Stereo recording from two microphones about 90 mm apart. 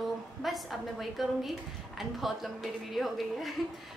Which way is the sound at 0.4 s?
Centre (ahead or behind).